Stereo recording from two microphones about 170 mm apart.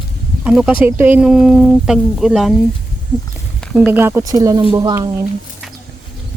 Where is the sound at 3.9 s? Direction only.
15° right (ahead or behind).